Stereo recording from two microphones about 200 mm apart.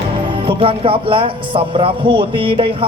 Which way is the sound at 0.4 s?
25° right (ahead or behind).